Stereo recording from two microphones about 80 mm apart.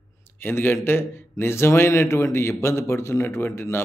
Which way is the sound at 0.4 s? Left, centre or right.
Left.